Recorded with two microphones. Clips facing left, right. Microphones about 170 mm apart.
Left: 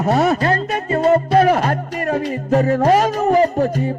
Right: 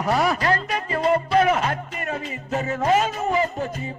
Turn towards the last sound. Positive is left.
turn(degrees=40)  # may be behind; listen again after turning